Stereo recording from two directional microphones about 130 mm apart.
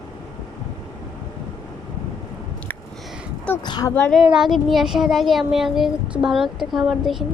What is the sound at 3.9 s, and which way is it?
Child singing, 10° left (ahead or behind).